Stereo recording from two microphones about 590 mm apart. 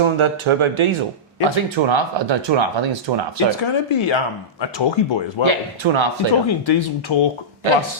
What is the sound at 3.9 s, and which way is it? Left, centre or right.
Speech, left.